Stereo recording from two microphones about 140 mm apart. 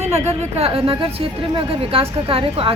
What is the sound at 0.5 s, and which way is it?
A woman's voice, 40° right (ahead or behind).